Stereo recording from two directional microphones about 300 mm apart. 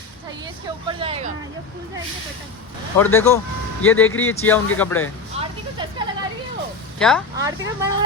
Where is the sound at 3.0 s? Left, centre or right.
Centre.